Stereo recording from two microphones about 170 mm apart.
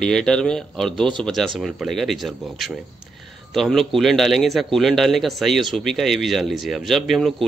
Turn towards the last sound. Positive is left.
turn(degrees=0)  # may be behind; listen again after turning